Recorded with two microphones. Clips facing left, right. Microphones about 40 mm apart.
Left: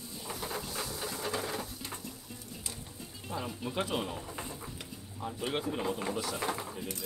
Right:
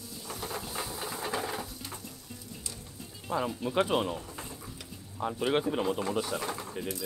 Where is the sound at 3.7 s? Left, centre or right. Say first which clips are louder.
Right 6 dB; right.